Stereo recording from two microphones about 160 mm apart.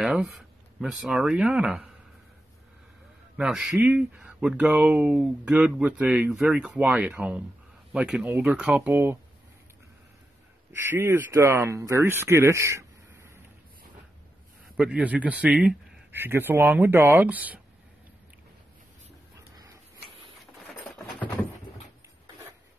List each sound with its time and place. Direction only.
0.0 s speech: 5° right (ahead or behind)
3.3 s speech: 5° right (ahead or behind)
10.7 s speech: 15° right (ahead or behind)
14.8 s speech: 10° right (ahead or behind)